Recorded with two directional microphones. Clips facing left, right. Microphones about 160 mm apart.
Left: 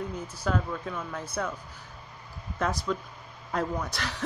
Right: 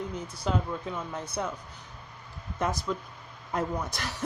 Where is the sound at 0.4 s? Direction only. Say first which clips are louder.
Left 1 dB; 20° right (ahead or behind).